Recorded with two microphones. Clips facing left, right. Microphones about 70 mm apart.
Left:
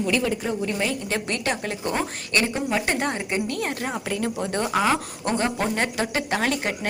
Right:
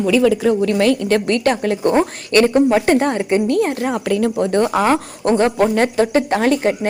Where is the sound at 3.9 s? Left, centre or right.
Right.